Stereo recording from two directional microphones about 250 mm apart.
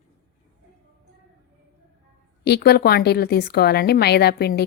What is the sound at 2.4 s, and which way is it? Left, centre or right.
A woman's voice, left.